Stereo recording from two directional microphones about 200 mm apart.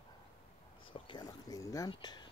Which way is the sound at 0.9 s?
25° left (ahead or behind).